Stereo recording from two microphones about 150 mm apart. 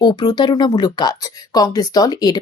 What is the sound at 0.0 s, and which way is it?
Speech, 30° left (ahead or behind).